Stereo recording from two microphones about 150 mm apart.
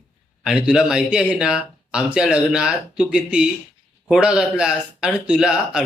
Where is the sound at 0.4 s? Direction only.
5° right (ahead or behind).